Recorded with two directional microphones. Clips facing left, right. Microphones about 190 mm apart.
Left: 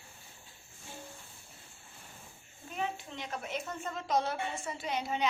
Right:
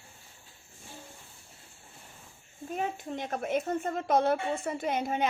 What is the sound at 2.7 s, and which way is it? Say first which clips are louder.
A woman's voice: right 4 dB; 45° right (ahead or behind).